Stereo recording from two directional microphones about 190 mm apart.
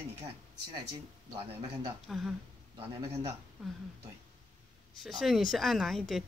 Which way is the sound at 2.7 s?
35° right (ahead or behind).